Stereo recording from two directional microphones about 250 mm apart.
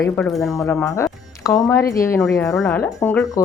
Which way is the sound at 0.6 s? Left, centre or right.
Centre.